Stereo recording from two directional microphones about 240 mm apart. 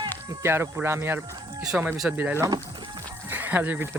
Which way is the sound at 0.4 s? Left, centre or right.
Centre.